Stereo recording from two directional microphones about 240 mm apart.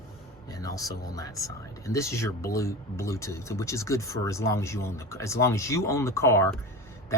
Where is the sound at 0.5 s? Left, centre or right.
Centre.